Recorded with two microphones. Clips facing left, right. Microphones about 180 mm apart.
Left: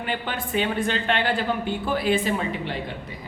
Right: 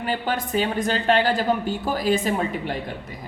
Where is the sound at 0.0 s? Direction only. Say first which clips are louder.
Right 4 dB; 40° right (ahead or behind).